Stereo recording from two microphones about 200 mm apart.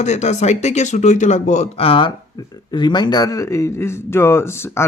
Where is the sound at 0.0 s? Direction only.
35° left (ahead or behind).